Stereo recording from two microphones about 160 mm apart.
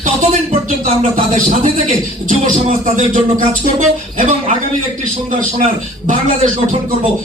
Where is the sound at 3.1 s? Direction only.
55° right (ahead or behind).